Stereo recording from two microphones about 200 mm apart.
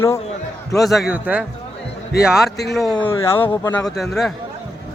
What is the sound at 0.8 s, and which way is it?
Speech, centre (ahead or behind).